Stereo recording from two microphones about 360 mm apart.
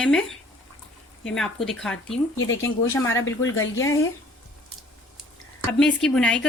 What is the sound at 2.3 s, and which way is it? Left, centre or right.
Speech, left.